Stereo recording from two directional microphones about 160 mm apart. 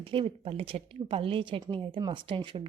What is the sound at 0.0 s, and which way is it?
A woman's voice, 35° right (ahead or behind).